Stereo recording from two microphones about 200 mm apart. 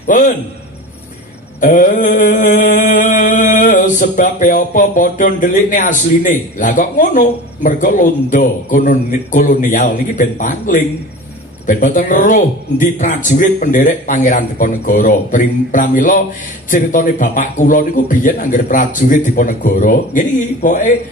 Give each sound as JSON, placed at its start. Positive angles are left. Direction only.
{"t": 0.0, "sound": "mantra", "side_deg": 40}
{"t": 1.6, "sound": "mantra", "side_deg": 40}